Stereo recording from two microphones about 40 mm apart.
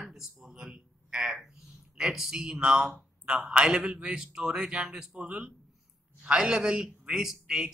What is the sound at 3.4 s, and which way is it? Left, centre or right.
Speech, right.